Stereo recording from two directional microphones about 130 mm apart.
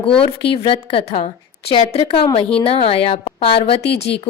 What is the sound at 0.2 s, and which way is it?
A woman's voice, 45° left (ahead or behind).